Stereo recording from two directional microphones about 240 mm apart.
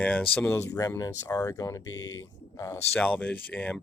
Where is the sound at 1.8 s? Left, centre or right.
Left.